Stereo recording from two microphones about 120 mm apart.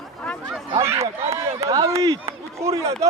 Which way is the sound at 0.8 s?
25° right (ahead or behind).